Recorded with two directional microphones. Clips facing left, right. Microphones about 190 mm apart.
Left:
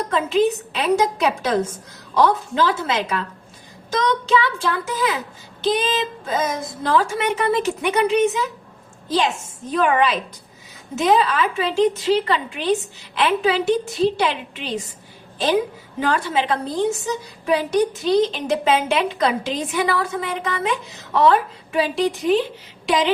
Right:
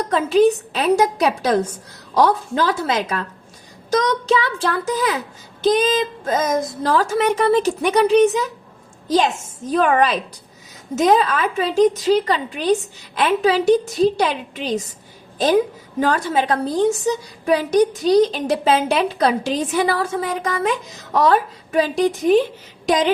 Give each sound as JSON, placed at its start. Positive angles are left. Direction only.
{"t": 0.1, "sound": "a woman's voice", "side_deg": -40}
{"t": 16.0, "sound": "a woman's voice", "side_deg": -45}